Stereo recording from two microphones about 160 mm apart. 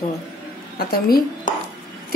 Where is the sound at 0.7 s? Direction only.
70° left (ahead or behind).